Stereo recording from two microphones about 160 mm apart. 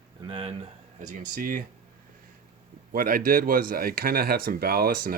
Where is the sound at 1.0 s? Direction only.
60° right (ahead or behind).